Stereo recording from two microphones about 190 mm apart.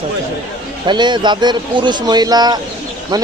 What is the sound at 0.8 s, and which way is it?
A man's voice, 25° right (ahead or behind).